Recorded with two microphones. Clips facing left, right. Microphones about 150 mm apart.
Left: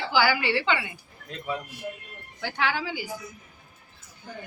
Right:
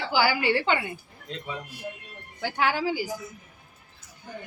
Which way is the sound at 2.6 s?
40° right (ahead or behind).